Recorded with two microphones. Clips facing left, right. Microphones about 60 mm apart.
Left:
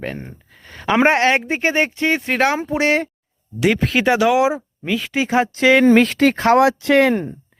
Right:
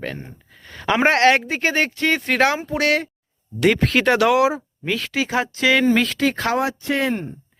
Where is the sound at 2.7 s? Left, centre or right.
Left.